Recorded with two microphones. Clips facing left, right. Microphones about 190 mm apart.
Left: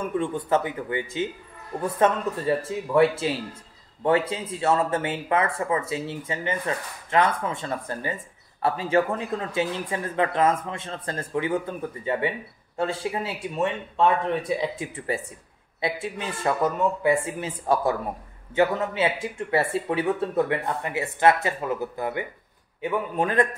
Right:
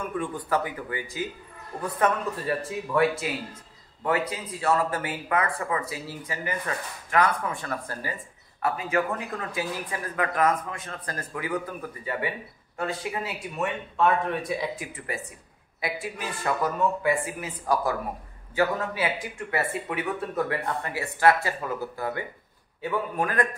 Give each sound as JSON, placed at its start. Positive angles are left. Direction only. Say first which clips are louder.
{"t": 0.0, "sound": "speech", "louder": "left 4 dB", "side_deg": 25}